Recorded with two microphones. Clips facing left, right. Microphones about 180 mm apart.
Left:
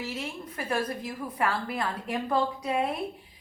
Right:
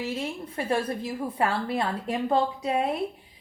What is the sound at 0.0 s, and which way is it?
A woman's voice, 30° right (ahead or behind).